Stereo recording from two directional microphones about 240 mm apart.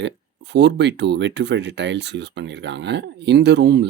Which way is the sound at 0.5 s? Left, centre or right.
Right.